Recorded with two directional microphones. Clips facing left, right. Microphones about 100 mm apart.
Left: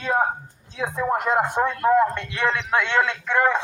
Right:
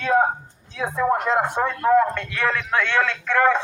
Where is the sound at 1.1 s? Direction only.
15° left (ahead or behind).